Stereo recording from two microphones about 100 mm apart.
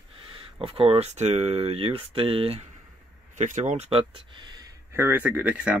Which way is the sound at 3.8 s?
70° right (ahead or behind).